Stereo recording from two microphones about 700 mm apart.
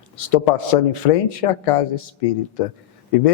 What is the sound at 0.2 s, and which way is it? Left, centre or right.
A man's voice, left.